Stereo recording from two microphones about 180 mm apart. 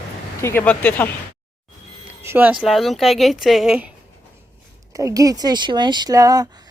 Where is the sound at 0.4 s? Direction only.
10° left (ahead or behind).